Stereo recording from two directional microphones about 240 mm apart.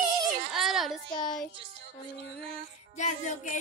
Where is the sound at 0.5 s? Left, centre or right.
Centre.